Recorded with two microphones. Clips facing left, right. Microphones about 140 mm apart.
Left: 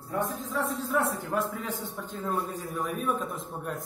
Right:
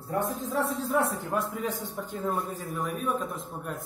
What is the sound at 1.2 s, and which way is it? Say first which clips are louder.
Speech: right 1 dB; 15° right (ahead or behind).